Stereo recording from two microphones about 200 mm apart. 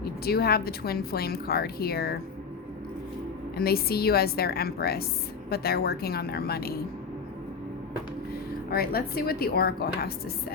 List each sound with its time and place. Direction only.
0.0 s a woman's voice: 50° left (ahead or behind)
3.6 s a woman's voice: 50° left (ahead or behind)
8.3 s speech: 50° left (ahead or behind)